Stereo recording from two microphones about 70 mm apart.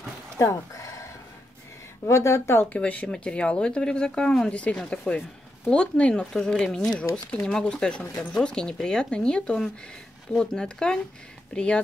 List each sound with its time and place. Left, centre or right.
0.4 s a sound: left
2.0 s speech: left
2.6 s speech: left